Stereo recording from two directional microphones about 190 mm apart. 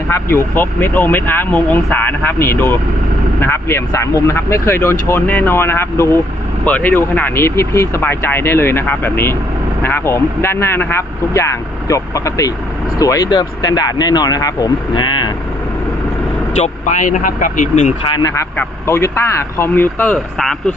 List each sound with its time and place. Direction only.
0.1 s speech: 15° left (ahead or behind)
16.6 s speech: 40° left (ahead or behind)
18.1 s speech: 20° left (ahead or behind); by 20.7 s centre (ahead or behind)